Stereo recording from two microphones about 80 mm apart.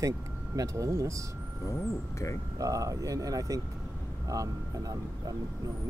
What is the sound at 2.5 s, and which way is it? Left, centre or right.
Speech, right.